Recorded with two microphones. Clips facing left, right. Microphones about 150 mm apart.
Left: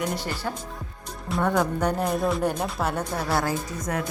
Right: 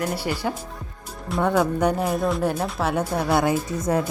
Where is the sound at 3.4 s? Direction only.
25° right (ahead or behind).